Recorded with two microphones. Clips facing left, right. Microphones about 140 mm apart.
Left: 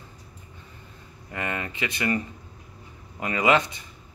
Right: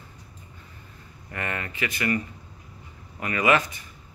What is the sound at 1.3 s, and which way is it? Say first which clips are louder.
Speech: left 1 dB; 20° left (ahead or behind).